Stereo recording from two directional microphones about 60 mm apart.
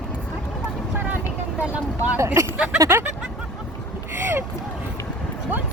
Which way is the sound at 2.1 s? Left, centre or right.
Right.